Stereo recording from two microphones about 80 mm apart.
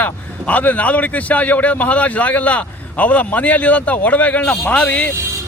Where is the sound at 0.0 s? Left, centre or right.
Left.